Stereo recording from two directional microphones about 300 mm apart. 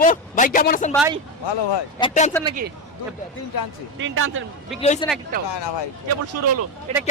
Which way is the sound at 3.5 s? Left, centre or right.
Left.